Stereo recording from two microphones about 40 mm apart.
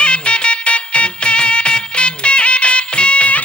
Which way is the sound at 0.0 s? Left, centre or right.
Left.